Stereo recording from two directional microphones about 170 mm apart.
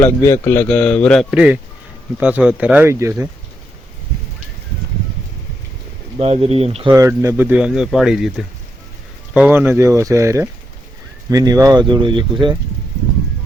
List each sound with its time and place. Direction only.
0.0 s a man's voice: 15° left (ahead or behind); by 3.2 s 15° right (ahead or behind)
6.1 s speech: 35° right (ahead or behind)
6.9 s speech: 15° right (ahead or behind); by 8.3 s centre (ahead or behind)
9.3 s speech: 10° right (ahead or behind); by 12.5 s 30° right (ahead or behind)